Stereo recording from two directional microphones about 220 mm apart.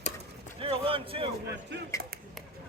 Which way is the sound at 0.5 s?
25° right (ahead or behind).